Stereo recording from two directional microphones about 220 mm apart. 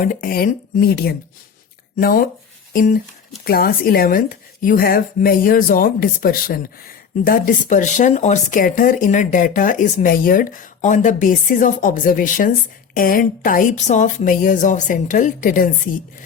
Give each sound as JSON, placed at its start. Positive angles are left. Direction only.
{"t": 0.0, "sound": "speech", "side_deg": 40}